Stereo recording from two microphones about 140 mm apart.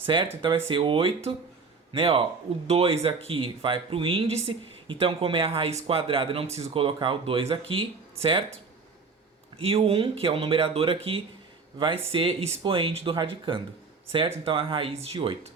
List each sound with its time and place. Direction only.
0.0 s speech: 35° right (ahead or behind)
9.6 s speech: 45° right (ahead or behind)